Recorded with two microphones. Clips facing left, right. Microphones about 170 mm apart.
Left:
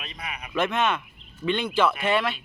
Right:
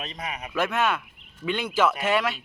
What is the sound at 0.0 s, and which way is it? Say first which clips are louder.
Speech: right 4 dB; 40° right (ahead or behind).